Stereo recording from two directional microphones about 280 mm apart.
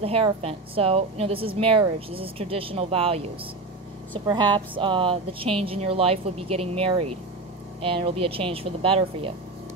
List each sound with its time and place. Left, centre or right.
0.0 s a woman's voice: right
4.3 s a woman's voice: centre